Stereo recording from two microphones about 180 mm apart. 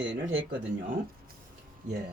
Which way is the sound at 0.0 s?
90° right.